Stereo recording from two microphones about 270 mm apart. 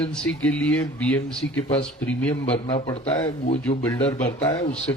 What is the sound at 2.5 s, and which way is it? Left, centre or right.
A man's voice, left.